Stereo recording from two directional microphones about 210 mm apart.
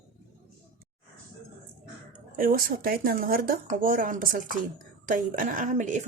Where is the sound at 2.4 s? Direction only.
45° right (ahead or behind).